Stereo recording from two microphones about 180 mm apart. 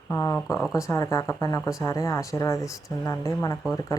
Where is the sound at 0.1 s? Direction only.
15° left (ahead or behind).